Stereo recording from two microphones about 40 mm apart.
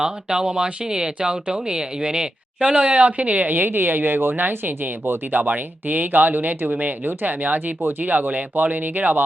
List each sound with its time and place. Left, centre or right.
0.0 s speech: centre
2.6 s speech: right
5.3 s speech: right
7.1 s speech: right
7.4 s speech: right
7.8 s speech: right
8.0 s speech: right